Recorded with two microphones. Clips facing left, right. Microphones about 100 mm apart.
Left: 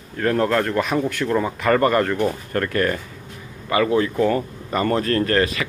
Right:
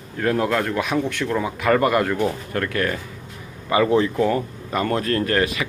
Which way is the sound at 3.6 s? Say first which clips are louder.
Right 1 dB; 20° right (ahead or behind).